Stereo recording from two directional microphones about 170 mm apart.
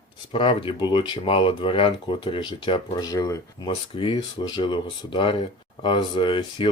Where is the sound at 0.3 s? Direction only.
30° left (ahead or behind).